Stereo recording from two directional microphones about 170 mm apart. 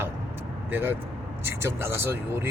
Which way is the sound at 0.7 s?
10° right (ahead or behind).